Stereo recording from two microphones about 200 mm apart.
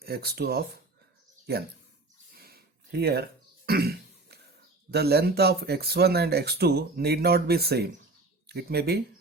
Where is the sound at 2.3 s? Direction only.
50° right (ahead or behind).